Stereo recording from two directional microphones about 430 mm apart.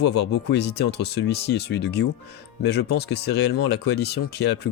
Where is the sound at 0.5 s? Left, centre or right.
Left.